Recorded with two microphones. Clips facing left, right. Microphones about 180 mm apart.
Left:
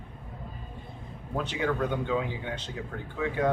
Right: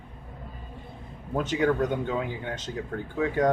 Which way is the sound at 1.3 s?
45° right (ahead or behind).